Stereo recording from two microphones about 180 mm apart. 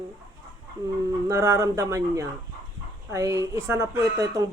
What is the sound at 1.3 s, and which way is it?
A woman's voice, 15° right (ahead or behind).